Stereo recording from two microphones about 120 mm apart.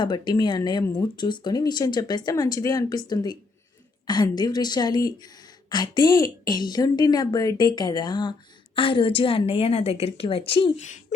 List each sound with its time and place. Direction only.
0.0 s a woman's voice: 40° left (ahead or behind)